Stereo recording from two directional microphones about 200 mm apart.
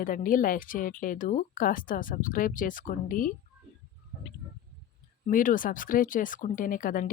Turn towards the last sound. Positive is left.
turn(degrees=45)  # may be behind; listen again after turning